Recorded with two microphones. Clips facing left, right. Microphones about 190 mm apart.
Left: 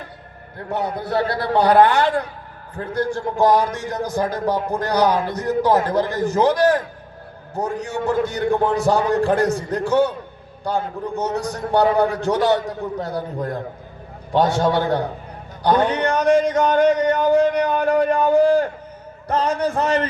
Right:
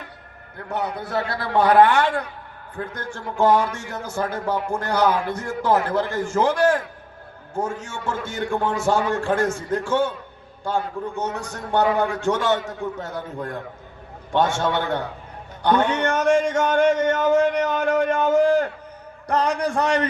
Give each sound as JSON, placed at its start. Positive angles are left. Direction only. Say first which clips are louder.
{"t": 0.7, "sound": "a man's voice", "louder": "left 3 dB", "side_deg": 35}